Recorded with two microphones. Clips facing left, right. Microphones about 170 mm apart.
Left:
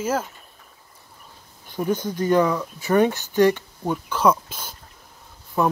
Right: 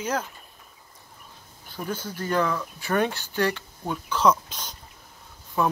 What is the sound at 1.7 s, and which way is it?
Speech, 20° left (ahead or behind).